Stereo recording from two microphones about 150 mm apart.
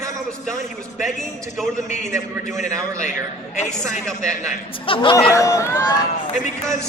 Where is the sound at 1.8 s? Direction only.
50° left (ahead or behind).